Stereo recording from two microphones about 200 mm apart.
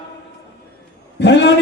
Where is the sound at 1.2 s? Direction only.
60° left (ahead or behind).